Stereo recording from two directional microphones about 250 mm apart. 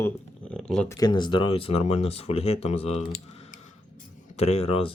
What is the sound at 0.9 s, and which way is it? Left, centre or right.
Speech, centre.